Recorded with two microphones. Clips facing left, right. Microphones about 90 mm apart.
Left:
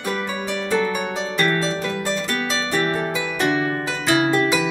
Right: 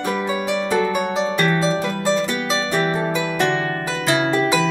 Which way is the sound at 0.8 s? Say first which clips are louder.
Right 3 dB; 5° right (ahead or behind).